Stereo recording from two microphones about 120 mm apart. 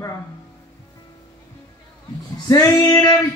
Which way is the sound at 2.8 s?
35° left (ahead or behind).